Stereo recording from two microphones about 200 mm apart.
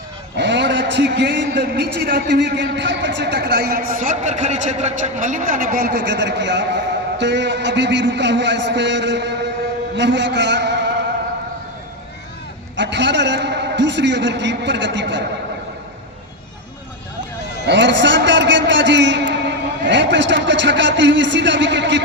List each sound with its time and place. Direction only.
0.3 s a man's voice: 60° right (ahead or behind)
12.7 s a man's voice: 60° right (ahead or behind)
17.7 s a man's voice: 65° right (ahead or behind)